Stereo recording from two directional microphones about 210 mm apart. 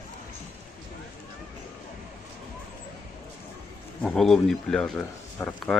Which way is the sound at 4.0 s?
5° left (ahead or behind).